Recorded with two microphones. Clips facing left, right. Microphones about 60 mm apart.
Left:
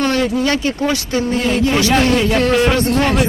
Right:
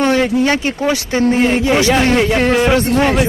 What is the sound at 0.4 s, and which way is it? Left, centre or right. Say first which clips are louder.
Speech: right 2 dB; centre.